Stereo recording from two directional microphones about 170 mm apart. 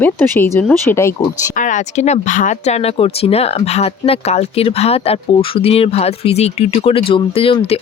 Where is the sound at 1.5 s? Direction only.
45° left (ahead or behind).